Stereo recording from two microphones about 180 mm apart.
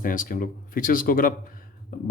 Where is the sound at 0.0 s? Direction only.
50° left (ahead or behind).